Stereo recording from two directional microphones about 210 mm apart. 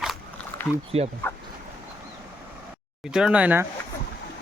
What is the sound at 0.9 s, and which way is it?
Speech, 30° right (ahead or behind).